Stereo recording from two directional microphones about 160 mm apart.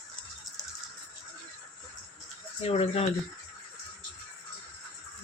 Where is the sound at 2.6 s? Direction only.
40° left (ahead or behind).